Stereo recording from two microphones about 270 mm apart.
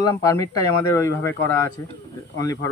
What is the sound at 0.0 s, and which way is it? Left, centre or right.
Speech, centre.